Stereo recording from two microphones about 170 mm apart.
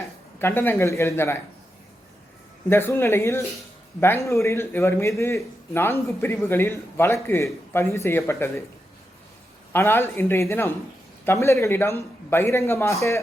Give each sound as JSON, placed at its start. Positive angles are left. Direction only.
{"t": 0.3, "sound": "a man's voice", "side_deg": 15}
{"t": 2.6, "sound": "a man's voice", "side_deg": 15}
{"t": 9.7, "sound": "a man's voice", "side_deg": 15}